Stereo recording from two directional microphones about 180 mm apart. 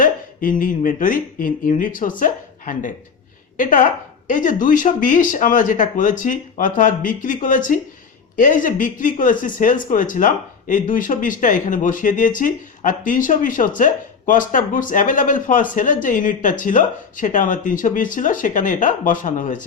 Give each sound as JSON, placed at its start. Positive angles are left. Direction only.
{"t": 0.0, "sound": "speech", "side_deg": 50}